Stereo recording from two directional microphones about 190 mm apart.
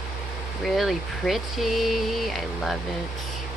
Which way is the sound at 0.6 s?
Centre (ahead or behind).